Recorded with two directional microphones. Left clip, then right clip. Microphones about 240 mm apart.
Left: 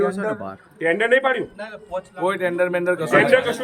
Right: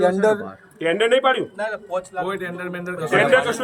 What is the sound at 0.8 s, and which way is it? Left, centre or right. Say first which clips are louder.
Speech: even; centre.